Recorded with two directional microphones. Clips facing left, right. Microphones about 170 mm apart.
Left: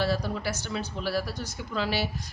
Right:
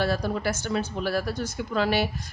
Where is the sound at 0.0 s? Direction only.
50° right (ahead or behind).